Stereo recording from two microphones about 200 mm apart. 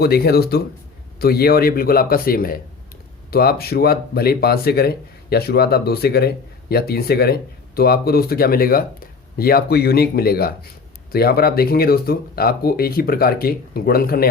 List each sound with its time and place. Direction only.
0.0 s speech: 50° left (ahead or behind)